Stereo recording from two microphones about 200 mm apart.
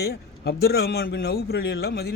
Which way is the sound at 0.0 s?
50° left (ahead or behind).